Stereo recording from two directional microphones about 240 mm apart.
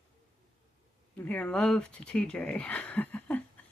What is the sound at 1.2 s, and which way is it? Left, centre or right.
Speech, centre.